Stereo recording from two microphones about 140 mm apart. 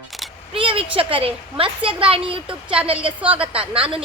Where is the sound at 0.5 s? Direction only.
40° right (ahead or behind).